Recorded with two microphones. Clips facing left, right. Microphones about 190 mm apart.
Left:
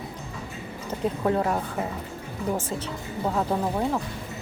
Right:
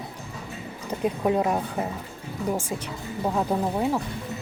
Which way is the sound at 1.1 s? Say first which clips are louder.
Right 1 dB; 15° right (ahead or behind).